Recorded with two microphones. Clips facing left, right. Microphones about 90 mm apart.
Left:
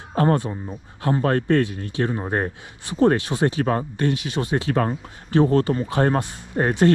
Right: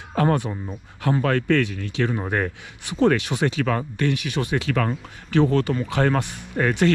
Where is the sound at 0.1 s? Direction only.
30° left (ahead or behind).